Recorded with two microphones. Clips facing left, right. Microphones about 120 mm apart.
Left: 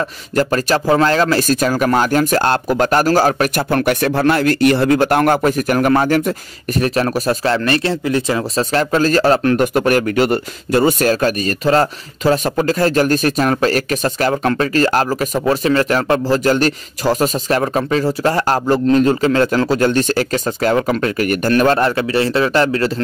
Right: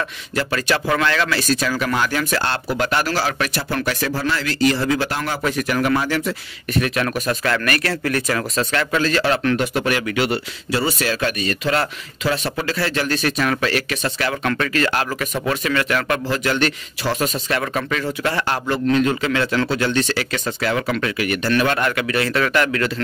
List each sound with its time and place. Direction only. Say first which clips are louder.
0.4 s speech: left 6 dB; 40° left (ahead or behind); by 8.5 s 20° left (ahead or behind)
8.5 s a man's voice: left 6 dB; 35° left (ahead or behind)